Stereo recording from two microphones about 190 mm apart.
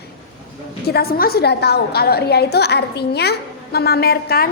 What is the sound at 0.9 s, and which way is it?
A woman's voice, 55° left (ahead or behind).